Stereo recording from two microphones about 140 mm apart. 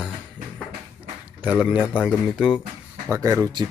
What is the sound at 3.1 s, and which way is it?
Speech, 20° right (ahead or behind).